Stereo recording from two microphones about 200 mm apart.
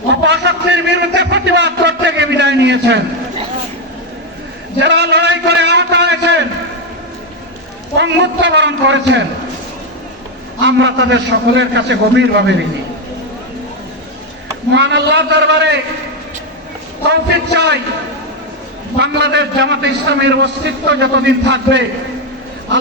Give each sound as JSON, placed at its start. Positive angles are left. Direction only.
{"t": 0.1, "sound": "a sound", "side_deg": -60}
{"t": 4.8, "sound": "a sound", "side_deg": -60}
{"t": 7.9, "sound": "a man's voice", "side_deg": -60}
{"t": 10.6, "sound": "a man's voice", "side_deg": -65}
{"t": 14.8, "sound": "a man's voice", "side_deg": -60}
{"t": 17.1, "sound": "a man's voice", "side_deg": -60}
{"t": 18.9, "sound": "a man's voice", "side_deg": -60}